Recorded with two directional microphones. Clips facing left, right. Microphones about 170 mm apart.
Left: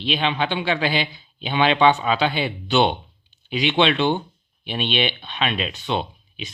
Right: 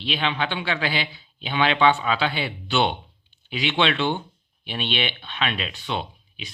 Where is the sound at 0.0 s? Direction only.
20° left (ahead or behind).